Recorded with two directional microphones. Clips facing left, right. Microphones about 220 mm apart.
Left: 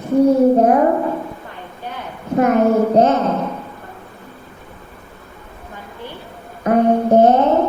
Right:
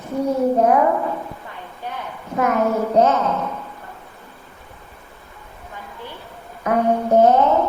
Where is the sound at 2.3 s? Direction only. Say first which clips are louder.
Left 6 dB; 30° left (ahead or behind).